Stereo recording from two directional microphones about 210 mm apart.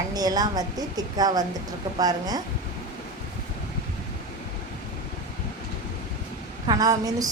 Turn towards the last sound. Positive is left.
turn(degrees=-15)  # may be behind; listen again after turning